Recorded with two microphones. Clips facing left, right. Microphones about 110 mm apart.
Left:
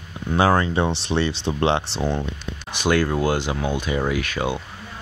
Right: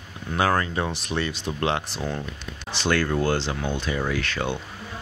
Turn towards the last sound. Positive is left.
turn(degrees=10)  # may be behind; listen again after turning